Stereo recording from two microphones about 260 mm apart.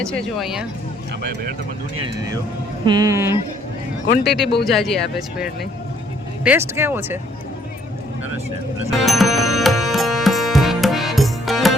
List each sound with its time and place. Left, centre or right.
0.0 s speech: centre
1.2 s speech: right
2.8 s speech: centre
4.0 s a man's voice: left
4.6 s speech: centre
8.9 s music: centre